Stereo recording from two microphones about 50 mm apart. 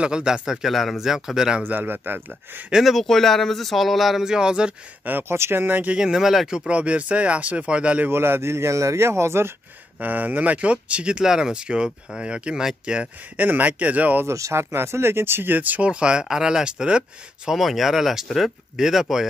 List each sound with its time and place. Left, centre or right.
0.0 s speech: centre
1.7 s speech: right
2.7 s speech: centre
4.2 s speech: centre
5.3 s speech: right
5.9 s speech: centre
6.7 s speech: right
8.1 s speech: right
9.9 s speech: right; by 13.1 s centre
13.4 s speech: right
14.2 s speech: right
15.9 s speech: centre
17.5 s speech: centre